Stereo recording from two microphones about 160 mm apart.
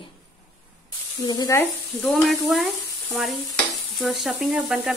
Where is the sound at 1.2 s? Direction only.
25° left (ahead or behind).